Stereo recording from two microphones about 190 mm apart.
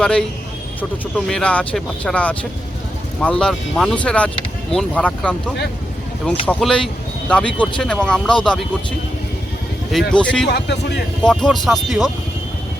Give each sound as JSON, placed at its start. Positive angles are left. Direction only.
{"t": 0.0, "sound": "speech", "side_deg": 5}
{"t": 10.1, "sound": "speech", "side_deg": 5}
{"t": 10.5, "sound": "speech", "side_deg": 60}
{"t": 11.2, "sound": "speech", "side_deg": 5}